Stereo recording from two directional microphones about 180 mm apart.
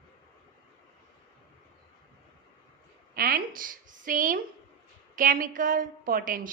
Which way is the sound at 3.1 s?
55° right (ahead or behind).